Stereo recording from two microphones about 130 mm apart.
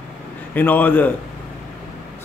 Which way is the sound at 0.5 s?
15° left (ahead or behind).